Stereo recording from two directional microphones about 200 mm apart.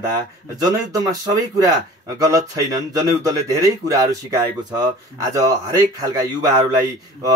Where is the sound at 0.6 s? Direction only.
20° right (ahead or behind).